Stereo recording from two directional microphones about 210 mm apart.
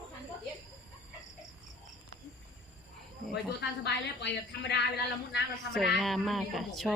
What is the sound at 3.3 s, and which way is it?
A woman's voice, 55° left (ahead or behind).